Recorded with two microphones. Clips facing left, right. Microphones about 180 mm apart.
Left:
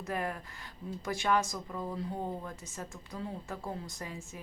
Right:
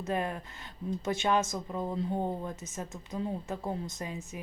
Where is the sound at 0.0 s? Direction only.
25° right (ahead or behind).